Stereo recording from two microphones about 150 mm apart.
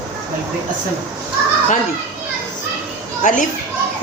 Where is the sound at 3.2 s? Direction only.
60° left (ahead or behind).